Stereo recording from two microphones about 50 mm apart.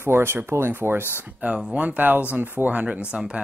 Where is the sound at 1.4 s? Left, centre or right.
Right.